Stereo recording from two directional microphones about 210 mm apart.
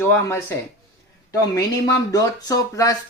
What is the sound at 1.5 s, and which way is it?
Speech, 15° left (ahead or behind).